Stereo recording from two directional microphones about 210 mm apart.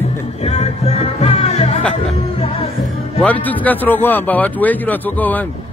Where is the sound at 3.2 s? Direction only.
5° left (ahead or behind).